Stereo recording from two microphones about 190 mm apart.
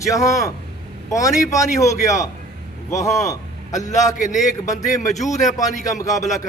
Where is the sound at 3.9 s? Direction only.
40° left (ahead or behind).